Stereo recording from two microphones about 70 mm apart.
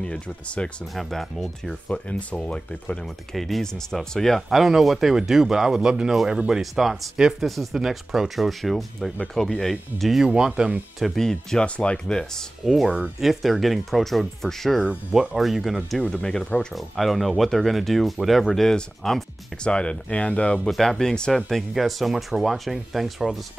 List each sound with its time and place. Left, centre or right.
0.0 s speech: centre
0.9 s speech: centre
1.9 s speech: centre
3.3 s speech: centre
11.0 s speech: centre
12.6 s speech: centre
16.0 s speech: centre
16.7 s speech: centre